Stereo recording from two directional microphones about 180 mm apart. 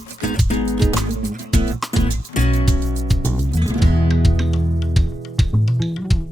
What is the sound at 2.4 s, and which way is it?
Music, 40° left (ahead or behind).